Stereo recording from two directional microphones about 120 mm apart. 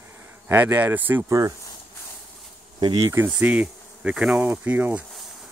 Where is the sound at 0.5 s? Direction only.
15° right (ahead or behind).